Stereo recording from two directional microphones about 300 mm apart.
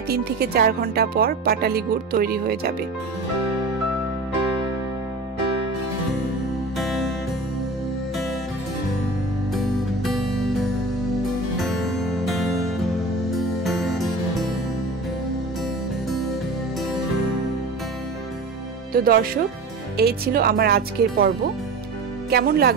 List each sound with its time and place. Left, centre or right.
0.1 s speech: right
6.8 s music: centre
9.5 s music: centre
11.6 s music: centre
13.7 s music: centre
18.9 s speech: right
22.3 s speech: right